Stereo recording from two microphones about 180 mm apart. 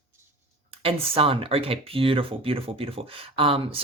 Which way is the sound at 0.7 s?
30° right (ahead or behind).